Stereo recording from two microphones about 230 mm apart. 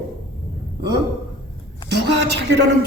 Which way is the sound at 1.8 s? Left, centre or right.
Right.